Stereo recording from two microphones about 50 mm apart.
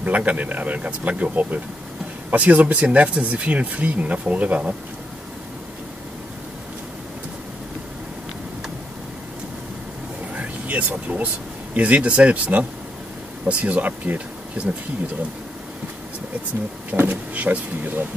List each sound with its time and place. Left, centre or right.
0.0 s speech: right
10.3 s vehicle: right
11.7 s speech: right
16.9 s speech: right